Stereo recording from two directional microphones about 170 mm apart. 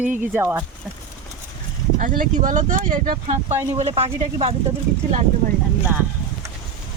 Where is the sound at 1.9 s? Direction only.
50° right (ahead or behind).